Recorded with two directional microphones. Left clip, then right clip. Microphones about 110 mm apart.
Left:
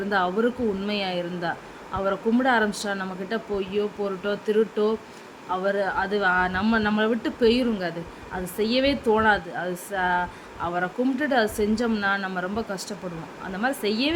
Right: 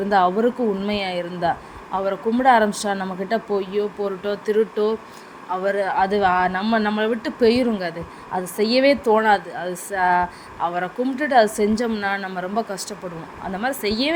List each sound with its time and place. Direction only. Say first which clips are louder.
0.1 s speech: right 6 dB; 35° right (ahead or behind)